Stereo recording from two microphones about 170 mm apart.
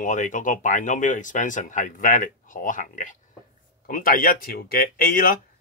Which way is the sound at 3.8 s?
55° left (ahead or behind).